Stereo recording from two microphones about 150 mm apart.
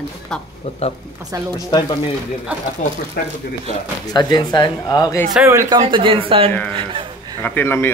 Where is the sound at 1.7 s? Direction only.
25° left (ahead or behind).